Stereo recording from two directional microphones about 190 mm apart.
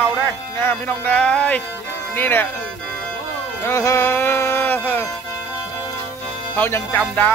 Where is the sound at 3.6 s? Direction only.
15° left (ahead or behind).